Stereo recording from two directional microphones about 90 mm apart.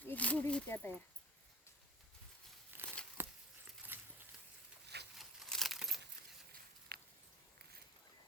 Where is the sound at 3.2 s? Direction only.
25° right (ahead or behind).